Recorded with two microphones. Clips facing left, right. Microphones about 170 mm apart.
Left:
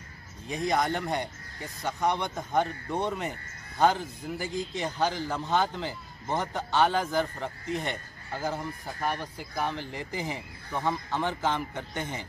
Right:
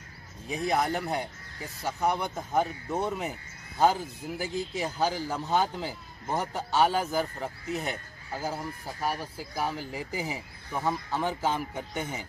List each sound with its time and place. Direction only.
0.5 s speech: 5° right (ahead or behind)